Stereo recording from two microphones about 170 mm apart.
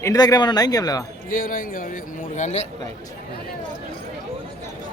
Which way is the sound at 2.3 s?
45° left (ahead or behind).